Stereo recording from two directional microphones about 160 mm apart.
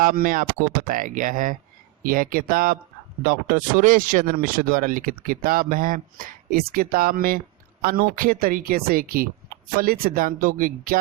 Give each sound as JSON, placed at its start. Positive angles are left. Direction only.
{"t": 0.0, "sound": "speech", "side_deg": -65}